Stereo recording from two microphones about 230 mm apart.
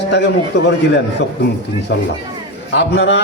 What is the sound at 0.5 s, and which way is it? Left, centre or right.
Speech, left.